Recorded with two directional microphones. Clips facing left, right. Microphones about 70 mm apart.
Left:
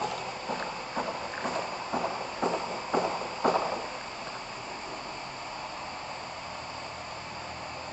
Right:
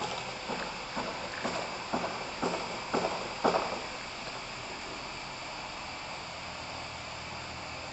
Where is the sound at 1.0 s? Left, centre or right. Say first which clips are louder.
Left 3 dB; left.